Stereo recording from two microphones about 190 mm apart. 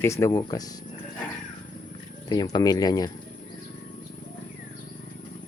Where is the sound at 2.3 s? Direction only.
20° left (ahead or behind).